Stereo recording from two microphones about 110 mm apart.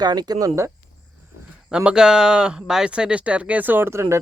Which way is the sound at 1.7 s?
10° right (ahead or behind).